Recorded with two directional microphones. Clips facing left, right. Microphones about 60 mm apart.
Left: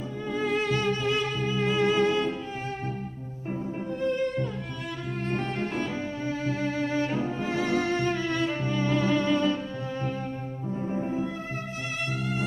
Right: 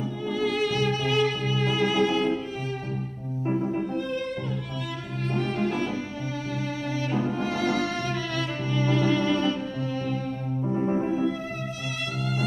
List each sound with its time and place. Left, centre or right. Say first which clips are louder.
0.3 s music: right 1 dB; left
6.9 s music: even; left
10.7 s music: right 6 dB; right
12.2 s music: right 3 dB; left